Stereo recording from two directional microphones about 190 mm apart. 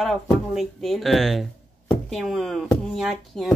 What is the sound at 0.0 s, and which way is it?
Speech, centre (ahead or behind).